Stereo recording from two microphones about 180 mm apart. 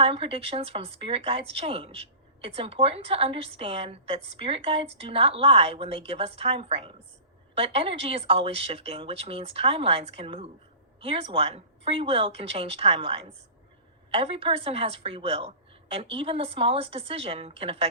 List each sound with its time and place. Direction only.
0.0 s a woman's voice: 30° right (ahead or behind)